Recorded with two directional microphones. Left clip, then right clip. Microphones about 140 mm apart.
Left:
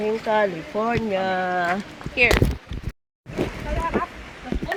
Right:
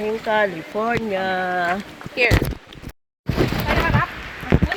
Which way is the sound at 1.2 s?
15° right (ahead or behind).